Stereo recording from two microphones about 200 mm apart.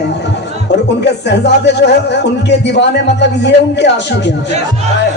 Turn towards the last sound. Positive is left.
turn(degrees=60)  # may be behind; listen again after turning